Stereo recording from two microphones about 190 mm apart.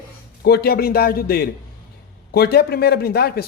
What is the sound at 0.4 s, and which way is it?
A man's voice, 55° left (ahead or behind).